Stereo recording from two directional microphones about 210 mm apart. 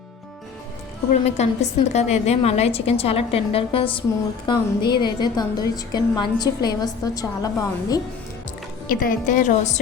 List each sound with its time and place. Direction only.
1.2 s a woman's voice: 30° left (ahead or behind)
8.9 s a woman's voice: 40° left (ahead or behind)